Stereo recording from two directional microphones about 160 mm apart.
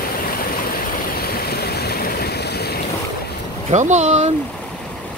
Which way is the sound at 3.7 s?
45° right (ahead or behind).